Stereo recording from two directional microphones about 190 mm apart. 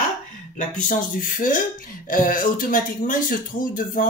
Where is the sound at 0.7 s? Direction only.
45° left (ahead or behind).